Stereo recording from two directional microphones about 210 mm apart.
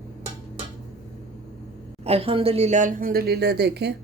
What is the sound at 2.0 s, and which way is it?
A woman's voice, 25° right (ahead or behind).